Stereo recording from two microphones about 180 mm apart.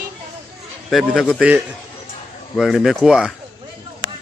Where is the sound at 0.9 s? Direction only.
Centre (ahead or behind).